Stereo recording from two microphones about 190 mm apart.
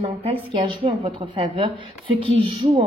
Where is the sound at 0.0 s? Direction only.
25° right (ahead or behind).